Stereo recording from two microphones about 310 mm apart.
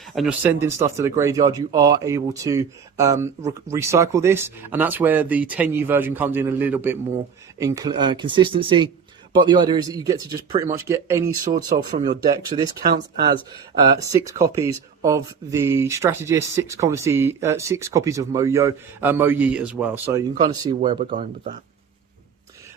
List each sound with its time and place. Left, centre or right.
0.0 s speech: centre
12.9 s speech: right
13.7 s speech: centre